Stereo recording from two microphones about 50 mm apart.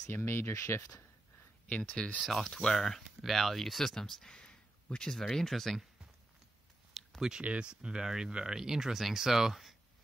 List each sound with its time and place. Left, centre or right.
0.1 s speech: left
1.7 s speech: centre
2.2 s speech: centre
2.5 s speech: centre
4.4 s a sound: left
5.3 s speech: centre
7.2 s speech: centre